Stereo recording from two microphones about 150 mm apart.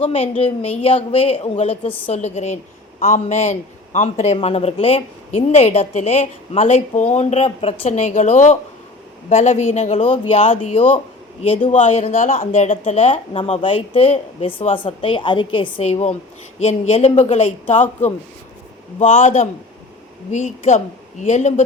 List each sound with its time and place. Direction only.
0.0 s a man's voice: 40° left (ahead or behind)
10.2 s speech: 40° left (ahead or behind)
11.7 s a man's voice: 55° left (ahead or behind)
12.8 s speech: 40° left (ahead or behind)
15.8 s a man's voice: 45° left (ahead or behind)
18.9 s a man's voice: 55° left (ahead or behind)